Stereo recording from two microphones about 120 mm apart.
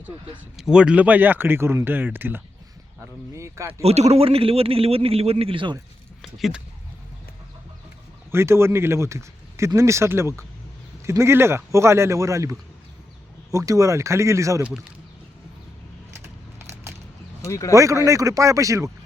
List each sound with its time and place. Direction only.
0.5 s speech: 5° right (ahead or behind); by 3.8 s 25° right (ahead or behind)
3.8 s a man's voice: 60° right (ahead or behind); by 5.7 s 45° right (ahead or behind)
6.2 s speech: centre (ahead or behind)
8.3 s speech: 20° right (ahead or behind)
16.2 s a sound: 20° right (ahead or behind)
17.4 s speech: 25° left (ahead or behind)
18.0 s speech: 25° right (ahead or behind)